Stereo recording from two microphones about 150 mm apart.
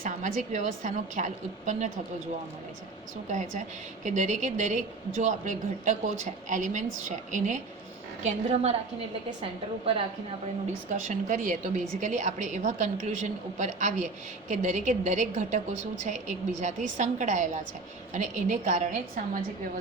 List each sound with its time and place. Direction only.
0.0 s a woman's voice: 60° right (ahead or behind)
3.2 s a woman's voice: 55° right (ahead or behind)
9.4 s a woman's voice: 40° right (ahead or behind)
10.8 s a woman's voice: 55° right (ahead or behind)